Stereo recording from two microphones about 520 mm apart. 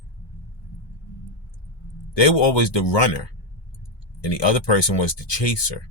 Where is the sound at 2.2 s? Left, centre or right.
Left.